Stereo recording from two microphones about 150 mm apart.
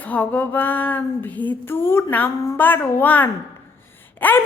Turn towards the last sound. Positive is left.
turn(degrees=10)  # may be behind; listen again after turning